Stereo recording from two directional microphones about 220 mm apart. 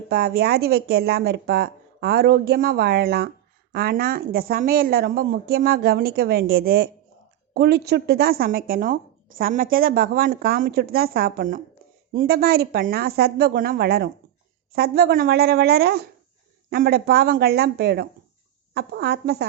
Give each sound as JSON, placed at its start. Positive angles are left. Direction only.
{"t": 0.1, "sound": "speech", "side_deg": -45}